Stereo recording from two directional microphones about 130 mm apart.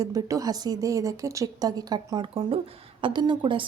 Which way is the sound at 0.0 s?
25° right (ahead or behind).